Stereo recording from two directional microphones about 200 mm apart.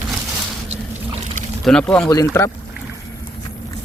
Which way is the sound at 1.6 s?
5° left (ahead or behind).